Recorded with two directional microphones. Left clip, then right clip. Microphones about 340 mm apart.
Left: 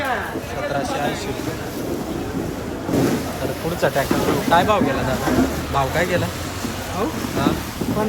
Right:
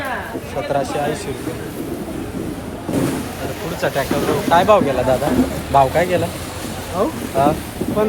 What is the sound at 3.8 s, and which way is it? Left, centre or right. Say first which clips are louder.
Speech: even; centre.